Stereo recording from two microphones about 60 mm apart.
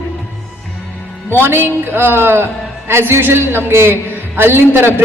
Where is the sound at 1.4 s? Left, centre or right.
Right.